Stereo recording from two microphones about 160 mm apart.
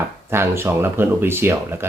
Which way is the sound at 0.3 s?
15° right (ahead or behind).